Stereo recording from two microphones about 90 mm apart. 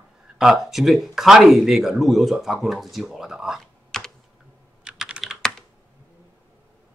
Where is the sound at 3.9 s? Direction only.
5° left (ahead or behind).